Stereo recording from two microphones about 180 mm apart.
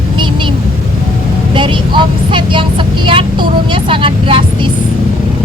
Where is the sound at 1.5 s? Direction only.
25° right (ahead or behind).